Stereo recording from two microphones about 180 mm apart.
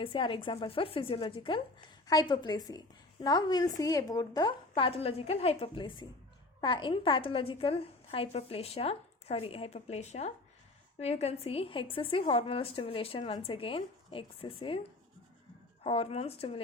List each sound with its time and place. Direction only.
0.0 s a woman's voice: 30° left (ahead or behind)
15.8 s a woman's voice: 35° left (ahead or behind)